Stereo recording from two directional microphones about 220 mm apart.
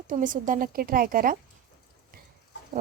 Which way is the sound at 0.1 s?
35° right (ahead or behind).